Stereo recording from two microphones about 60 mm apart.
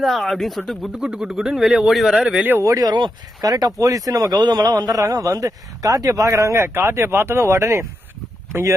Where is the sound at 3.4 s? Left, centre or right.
Right.